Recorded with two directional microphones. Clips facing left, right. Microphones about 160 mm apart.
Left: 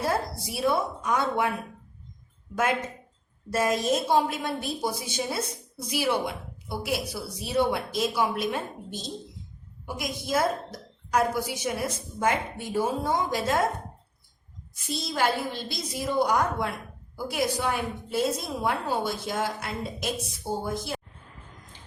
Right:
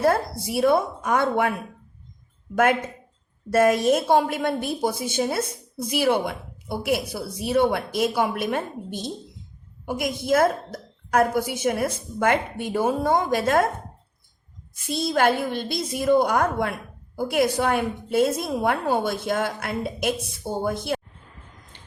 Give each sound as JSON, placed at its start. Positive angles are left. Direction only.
{"t": 0.0, "sound": "a woman's voice", "side_deg": -60}
{"t": 3.5, "sound": "a woman's voice", "side_deg": -55}
{"t": 14.8, "sound": "a woman's voice", "side_deg": -55}
{"t": 21.7, "sound": "drip", "side_deg": -65}